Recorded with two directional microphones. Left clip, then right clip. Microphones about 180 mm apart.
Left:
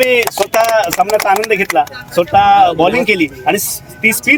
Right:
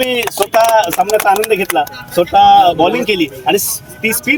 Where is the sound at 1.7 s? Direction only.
50° right (ahead or behind).